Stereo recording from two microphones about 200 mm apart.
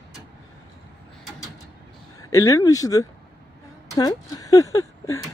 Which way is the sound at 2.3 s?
15° left (ahead or behind).